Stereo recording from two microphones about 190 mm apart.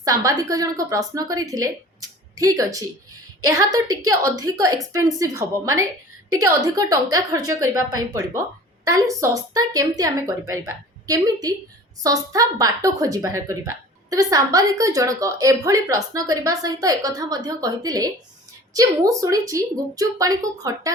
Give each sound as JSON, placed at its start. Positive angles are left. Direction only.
{"t": 0.0, "sound": "a woman's voice", "side_deg": -15}
{"t": 7.6, "sound": "a woman's voice", "side_deg": -90}
{"t": 8.8, "sound": "a woman's voice", "side_deg": -15}